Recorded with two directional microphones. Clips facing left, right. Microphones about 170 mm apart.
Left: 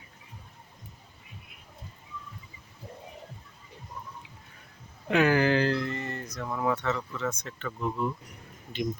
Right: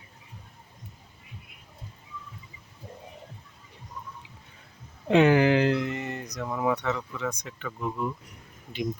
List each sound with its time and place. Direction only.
5.0 s speech: 25° right (ahead or behind); by 8.1 s centre (ahead or behind)